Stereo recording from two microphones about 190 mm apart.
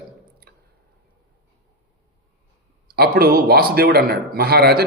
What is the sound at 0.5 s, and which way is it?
Squish, 50° right (ahead or behind).